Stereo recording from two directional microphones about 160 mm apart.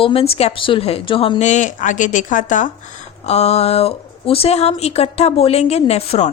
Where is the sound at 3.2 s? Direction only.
40° left (ahead or behind).